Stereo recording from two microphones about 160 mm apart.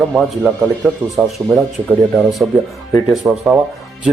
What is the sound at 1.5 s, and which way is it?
Speech, 20° right (ahead or behind).